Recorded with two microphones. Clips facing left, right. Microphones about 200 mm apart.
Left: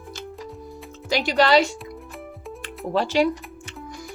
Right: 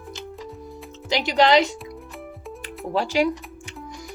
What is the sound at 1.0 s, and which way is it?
Speech, 20° right (ahead or behind).